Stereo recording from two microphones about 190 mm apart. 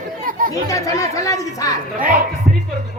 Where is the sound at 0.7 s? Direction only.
15° left (ahead or behind).